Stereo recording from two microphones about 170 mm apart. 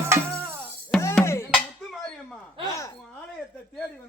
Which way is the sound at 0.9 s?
10° left (ahead or behind).